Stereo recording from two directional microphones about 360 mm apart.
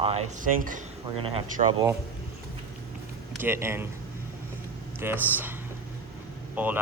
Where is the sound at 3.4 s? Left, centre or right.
Centre.